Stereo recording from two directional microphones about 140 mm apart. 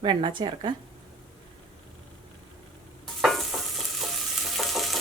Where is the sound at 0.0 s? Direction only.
35° right (ahead or behind).